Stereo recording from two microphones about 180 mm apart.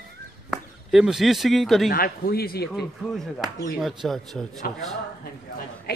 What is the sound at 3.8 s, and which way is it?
Speech, centre (ahead or behind).